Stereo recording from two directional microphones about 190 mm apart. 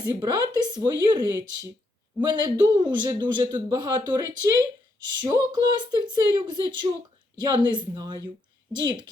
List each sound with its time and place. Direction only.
0.0 s speech: 20° right (ahead or behind)